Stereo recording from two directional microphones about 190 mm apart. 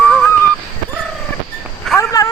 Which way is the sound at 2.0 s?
20° left (ahead or behind).